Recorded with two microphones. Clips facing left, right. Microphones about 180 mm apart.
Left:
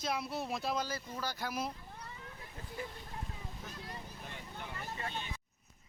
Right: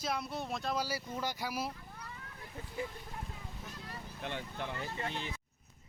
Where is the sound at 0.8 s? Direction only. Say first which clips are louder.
Right 2 dB; 10° right (ahead or behind).